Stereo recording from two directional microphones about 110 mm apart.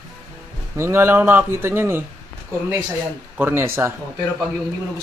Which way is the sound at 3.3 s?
20° right (ahead or behind).